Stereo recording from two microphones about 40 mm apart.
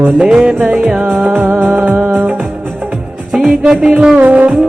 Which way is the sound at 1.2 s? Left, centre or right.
Right.